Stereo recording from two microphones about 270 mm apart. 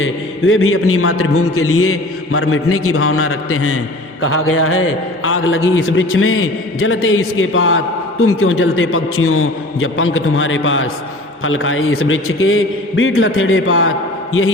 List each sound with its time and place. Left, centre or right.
0.0 s a man's voice: left